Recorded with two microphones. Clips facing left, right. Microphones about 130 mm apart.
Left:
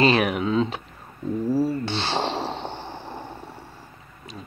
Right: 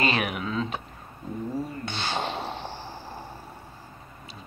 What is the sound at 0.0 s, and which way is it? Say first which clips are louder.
Speech: left 7 dB; 35° left (ahead or behind).